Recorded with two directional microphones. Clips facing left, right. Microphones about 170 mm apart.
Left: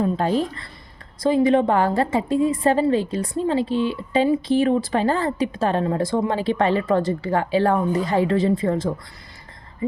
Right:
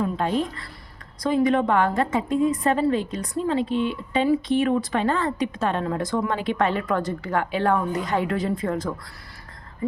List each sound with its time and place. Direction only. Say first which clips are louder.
0.0 s speech: left 3 dB; 35° left (ahead or behind)